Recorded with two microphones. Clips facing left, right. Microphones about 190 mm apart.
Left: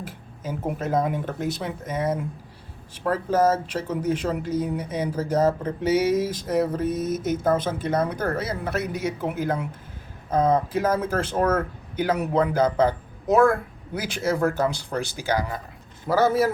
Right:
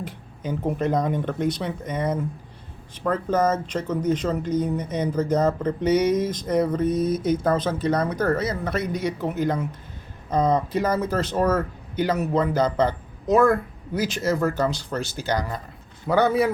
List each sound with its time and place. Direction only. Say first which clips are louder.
0.0 s a man's voice: right 2 dB; 5° left (ahead or behind)